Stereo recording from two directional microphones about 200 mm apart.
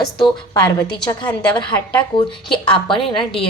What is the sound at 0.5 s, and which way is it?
Speech, 20° left (ahead or behind).